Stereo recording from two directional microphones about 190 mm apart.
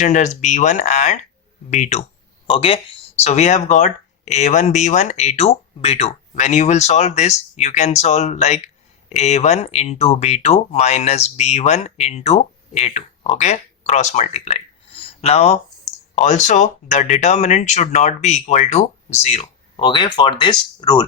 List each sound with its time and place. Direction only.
0.0 s speech: 40° left (ahead or behind); by 21.0 s 25° left (ahead or behind)